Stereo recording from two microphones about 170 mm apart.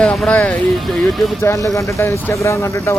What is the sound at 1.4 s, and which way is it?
Speech, 15° left (ahead or behind).